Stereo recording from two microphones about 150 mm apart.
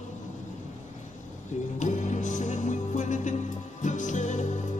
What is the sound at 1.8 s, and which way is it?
Music, 55° left (ahead or behind).